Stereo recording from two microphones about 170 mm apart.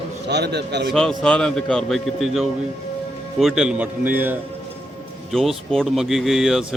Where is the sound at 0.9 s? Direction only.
5° left (ahead or behind).